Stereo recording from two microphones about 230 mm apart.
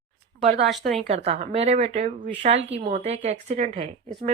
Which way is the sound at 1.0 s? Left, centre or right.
Right.